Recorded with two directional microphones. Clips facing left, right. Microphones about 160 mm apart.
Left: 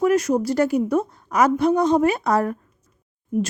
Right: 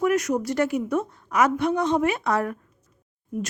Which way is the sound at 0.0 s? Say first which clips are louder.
Left 4 dB; 30° left (ahead or behind).